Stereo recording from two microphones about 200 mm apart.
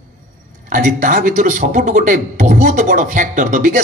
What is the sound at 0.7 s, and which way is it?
Speech, 40° right (ahead or behind).